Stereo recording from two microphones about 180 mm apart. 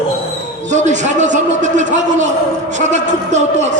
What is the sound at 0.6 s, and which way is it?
A man's voice, 40° right (ahead or behind).